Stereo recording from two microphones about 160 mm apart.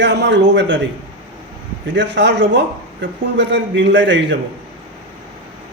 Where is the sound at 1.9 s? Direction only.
90° right.